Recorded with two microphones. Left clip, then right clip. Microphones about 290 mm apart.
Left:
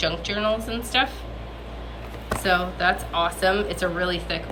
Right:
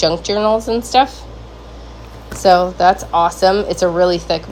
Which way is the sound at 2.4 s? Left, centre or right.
Centre.